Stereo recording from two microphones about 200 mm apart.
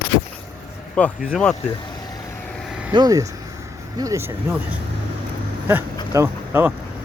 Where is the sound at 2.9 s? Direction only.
20° right (ahead or behind).